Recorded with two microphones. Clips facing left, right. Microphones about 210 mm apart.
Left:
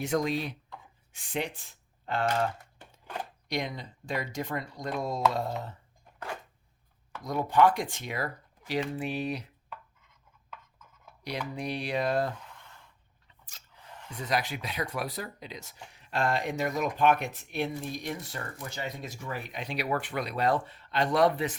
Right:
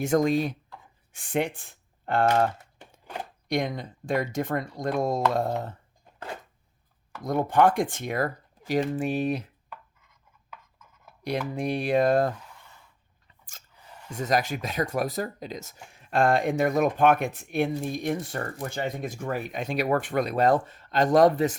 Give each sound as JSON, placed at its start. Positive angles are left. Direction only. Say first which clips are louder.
{"t": 0.0, "sound": "speech", "louder": "right 6 dB", "side_deg": -45}
{"t": 3.5, "sound": "speech", "louder": "right 6 dB", "side_deg": -50}
{"t": 7.3, "sound": "speech", "louder": "right 2 dB", "side_deg": -50}
{"t": 11.2, "sound": "speech", "louder": "right 6 dB", "side_deg": -50}
{"t": 14.1, "sound": "speech", "louder": "right 5 dB", "side_deg": -45}